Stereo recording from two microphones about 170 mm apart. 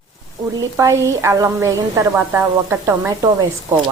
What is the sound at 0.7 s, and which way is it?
A woman's voice, 15° right (ahead or behind).